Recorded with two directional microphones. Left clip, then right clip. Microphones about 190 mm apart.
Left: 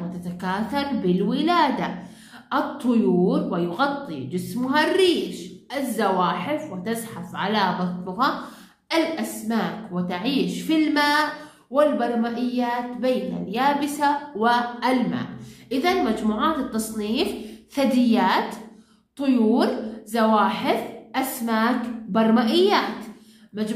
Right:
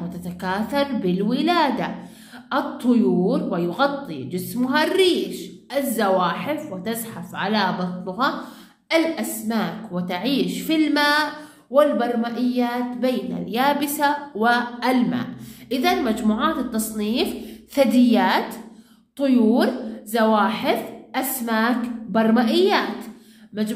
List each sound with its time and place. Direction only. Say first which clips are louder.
0.4 s a woman's voice: right 3 dB; 35° right (ahead or behind)